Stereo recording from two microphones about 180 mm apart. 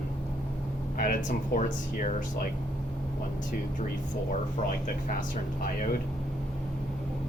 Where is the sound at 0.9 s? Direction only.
50° left (ahead or behind).